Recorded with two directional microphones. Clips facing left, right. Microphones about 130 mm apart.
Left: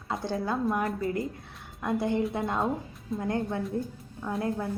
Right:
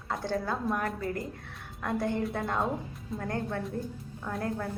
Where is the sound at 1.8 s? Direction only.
15° left (ahead or behind).